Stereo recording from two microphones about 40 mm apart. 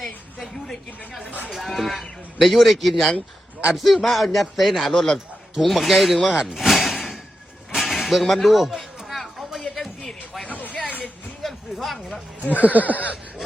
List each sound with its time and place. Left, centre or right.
0.0 s a woman's voice: centre
6.5 s slam: centre
7.8 s a sound: centre
10.4 s vehicle: left
11.4 s a sound: centre
12.5 s speech: left